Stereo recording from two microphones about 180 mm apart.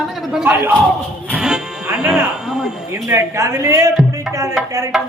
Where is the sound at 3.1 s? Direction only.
15° right (ahead or behind).